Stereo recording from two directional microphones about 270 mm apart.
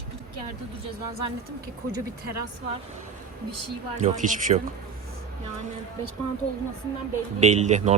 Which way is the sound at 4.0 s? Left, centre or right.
Right.